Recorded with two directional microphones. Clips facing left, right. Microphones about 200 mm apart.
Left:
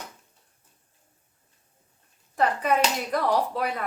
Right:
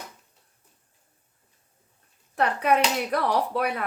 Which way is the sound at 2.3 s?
65° right (ahead or behind).